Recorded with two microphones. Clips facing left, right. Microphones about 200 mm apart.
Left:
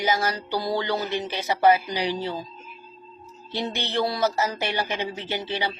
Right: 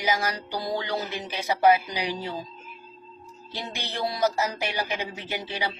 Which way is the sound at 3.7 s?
10° right (ahead or behind).